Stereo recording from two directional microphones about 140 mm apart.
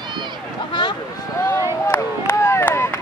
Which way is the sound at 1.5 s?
20° left (ahead or behind).